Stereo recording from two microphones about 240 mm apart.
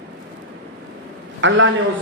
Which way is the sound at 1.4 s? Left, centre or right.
Right.